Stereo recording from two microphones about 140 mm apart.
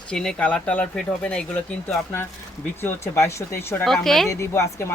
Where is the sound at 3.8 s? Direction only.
Centre (ahead or behind).